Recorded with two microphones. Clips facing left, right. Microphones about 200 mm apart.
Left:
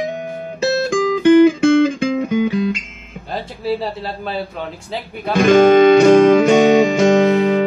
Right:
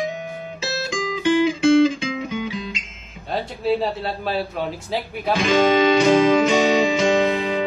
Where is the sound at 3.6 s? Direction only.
Centre (ahead or behind).